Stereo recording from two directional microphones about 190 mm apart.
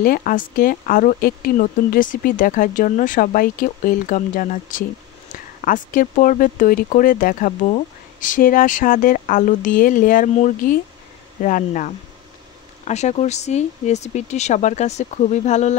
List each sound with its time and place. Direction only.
0.0 s speech: 45° left (ahead or behind)